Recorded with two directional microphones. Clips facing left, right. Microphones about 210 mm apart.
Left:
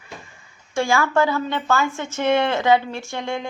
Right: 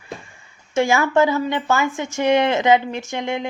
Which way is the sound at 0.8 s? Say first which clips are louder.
Right 3 dB; 20° right (ahead or behind).